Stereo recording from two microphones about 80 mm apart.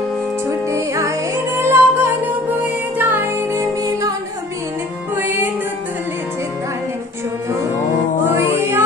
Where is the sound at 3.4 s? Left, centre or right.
Right.